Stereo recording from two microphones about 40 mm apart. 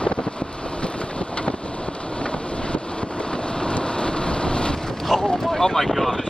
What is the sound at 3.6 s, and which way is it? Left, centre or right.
Rain, left.